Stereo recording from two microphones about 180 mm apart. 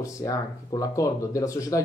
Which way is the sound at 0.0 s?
20° left (ahead or behind).